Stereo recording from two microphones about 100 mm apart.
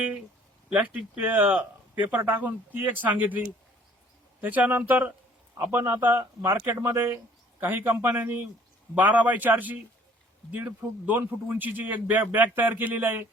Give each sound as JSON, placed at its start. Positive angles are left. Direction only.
{"t": 0.7, "sound": "speech", "side_deg": -15}